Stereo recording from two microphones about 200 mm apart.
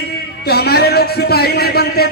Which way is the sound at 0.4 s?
50° left (ahead or behind).